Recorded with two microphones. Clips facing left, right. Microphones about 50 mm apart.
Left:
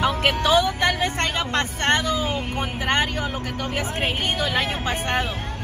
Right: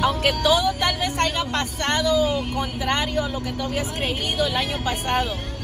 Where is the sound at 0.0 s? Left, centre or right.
Left.